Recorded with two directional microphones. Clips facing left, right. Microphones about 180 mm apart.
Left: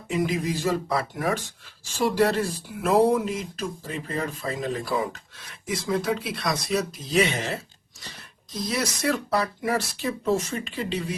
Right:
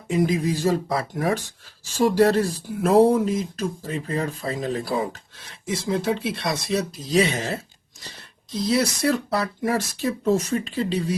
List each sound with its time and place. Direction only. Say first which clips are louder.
0.2 s speech: right 4 dB; 40° right (ahead or behind)